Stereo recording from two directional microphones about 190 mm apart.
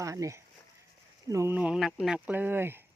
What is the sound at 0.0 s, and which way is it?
Speech, 15° right (ahead or behind).